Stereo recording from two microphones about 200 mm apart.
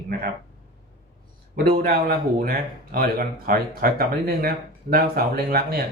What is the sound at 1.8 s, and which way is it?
Speech, 45° right (ahead or behind).